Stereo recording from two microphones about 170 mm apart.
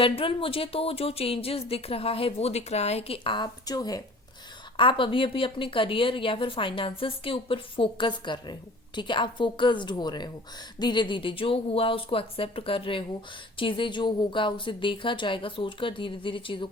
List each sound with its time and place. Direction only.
0.0 s a woman's voice: 30° left (ahead or behind)